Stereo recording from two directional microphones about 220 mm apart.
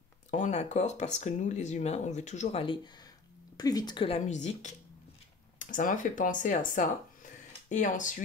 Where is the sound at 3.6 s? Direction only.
15° left (ahead or behind).